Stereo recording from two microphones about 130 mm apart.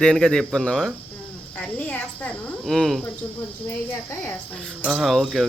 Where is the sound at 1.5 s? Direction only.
10° left (ahead or behind).